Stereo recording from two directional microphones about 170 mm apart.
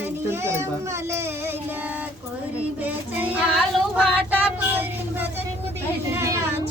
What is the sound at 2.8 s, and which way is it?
Child singing, 10° right (ahead or behind).